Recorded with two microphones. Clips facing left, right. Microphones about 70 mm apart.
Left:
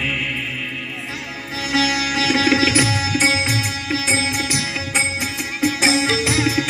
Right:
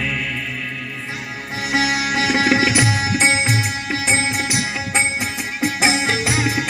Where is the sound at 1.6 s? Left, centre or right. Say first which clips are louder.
Even; right.